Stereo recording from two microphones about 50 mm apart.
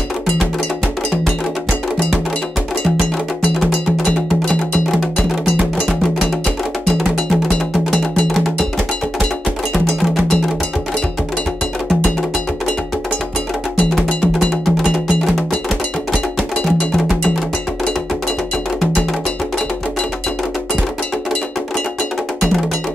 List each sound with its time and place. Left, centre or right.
3.5 s cowbell: centre
13.9 s cowbell: centre